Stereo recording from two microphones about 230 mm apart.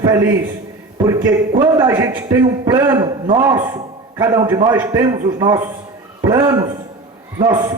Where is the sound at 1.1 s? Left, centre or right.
Right.